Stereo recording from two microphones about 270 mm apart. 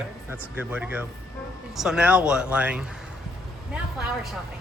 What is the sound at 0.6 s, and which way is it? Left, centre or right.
Speech, centre.